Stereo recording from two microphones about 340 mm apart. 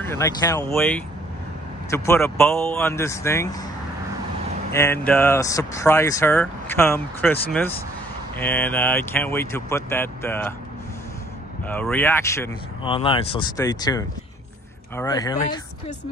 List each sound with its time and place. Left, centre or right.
0.0 s speech: centre
4.7 s speech: centre
11.6 s speech: centre